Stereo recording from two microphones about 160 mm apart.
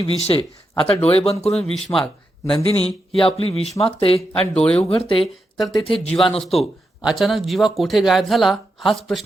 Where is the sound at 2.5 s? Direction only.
35° left (ahead or behind).